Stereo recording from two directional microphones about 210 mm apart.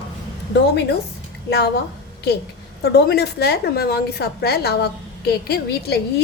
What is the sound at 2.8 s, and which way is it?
A woman's voice, 50° left (ahead or behind).